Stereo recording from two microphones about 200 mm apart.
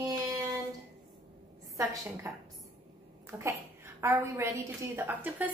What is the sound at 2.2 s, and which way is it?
A woman's voice, 15° right (ahead or behind).